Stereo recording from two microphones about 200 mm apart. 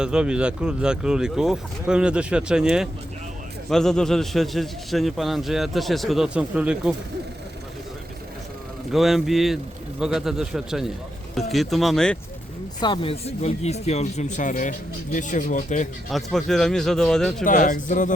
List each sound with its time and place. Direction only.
0.0 s a man's voice: 5° right (ahead or behind)
8.9 s a man's voice: centre (ahead or behind)
12.8 s speech: 25° left (ahead or behind); by 15.9 s 40° left (ahead or behind)
16.1 s a man's voice: centre (ahead or behind)
17.4 s speech: 40° left (ahead or behind)